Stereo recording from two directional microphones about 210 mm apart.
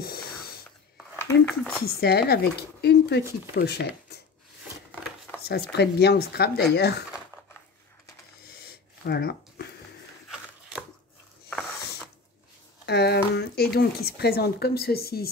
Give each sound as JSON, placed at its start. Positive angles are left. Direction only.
{"t": 0.0, "sound": "snort", "side_deg": 45}
{"t": 1.1, "sound": "dishes", "side_deg": 10}
{"t": 1.8, "sound": "speech", "side_deg": 45}
{"t": 5.4, "sound": "speech", "side_deg": 50}
{"t": 8.5, "sound": "a sound", "side_deg": 50}
{"t": 12.8, "sound": "speech", "side_deg": 50}